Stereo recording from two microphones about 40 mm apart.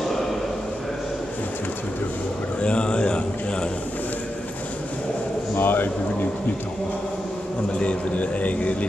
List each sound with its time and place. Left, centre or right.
2.6 s speech: left
5.6 s speech: left
7.8 s a man's voice: left